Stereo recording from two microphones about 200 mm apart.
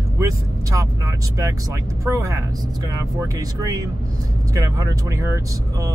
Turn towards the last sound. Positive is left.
turn(degrees=-15)  # may be behind; listen again after turning